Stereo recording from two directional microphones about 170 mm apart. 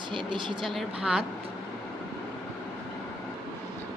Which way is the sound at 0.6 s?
Centre (ahead or behind).